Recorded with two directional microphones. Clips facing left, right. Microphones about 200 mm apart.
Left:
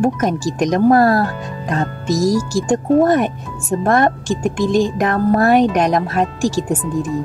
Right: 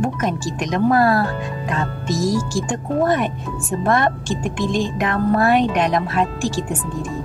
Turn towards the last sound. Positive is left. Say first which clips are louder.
# left 3 dB
turn(degrees=40)  # may be behind; listen again after turning